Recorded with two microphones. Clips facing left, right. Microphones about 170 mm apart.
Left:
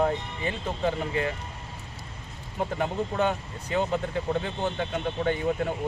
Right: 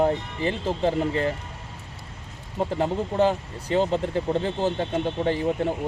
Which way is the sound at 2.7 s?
30° right (ahead or behind).